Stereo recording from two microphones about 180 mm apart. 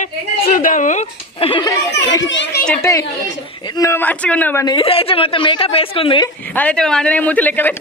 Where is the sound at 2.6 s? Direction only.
5° left (ahead or behind).